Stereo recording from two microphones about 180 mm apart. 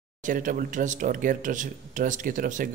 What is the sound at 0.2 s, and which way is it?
Speech, 45° right (ahead or behind).